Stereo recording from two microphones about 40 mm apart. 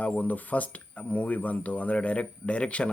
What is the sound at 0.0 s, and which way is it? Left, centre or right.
Speech, left.